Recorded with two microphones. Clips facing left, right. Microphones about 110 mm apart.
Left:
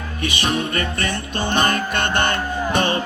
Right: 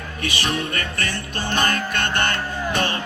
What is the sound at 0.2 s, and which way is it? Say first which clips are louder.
Music: left 3 dB; 20° left (ahead or behind).